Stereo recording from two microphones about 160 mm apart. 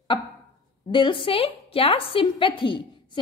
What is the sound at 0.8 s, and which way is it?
A woman's voice, 30° left (ahead or behind).